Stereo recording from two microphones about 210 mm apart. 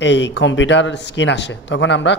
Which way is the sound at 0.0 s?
55° left (ahead or behind).